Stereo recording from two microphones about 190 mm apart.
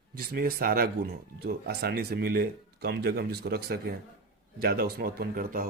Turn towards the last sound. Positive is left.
turn(degrees=-50)  # may be behind; listen again after turning